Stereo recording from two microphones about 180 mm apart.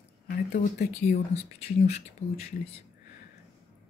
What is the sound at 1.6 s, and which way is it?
Speech, 35° left (ahead or behind).